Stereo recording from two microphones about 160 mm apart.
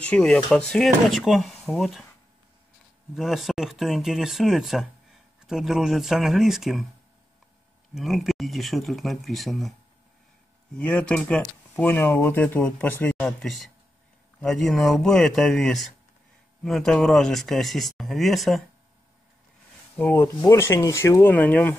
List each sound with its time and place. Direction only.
0.0 s speech: 5° left (ahead or behind)
3.2 s speech: centre (ahead or behind)
7.9 s speech: centre (ahead or behind)
10.8 s speech: 10° left (ahead or behind)
20.0 s speech: 10° left (ahead or behind)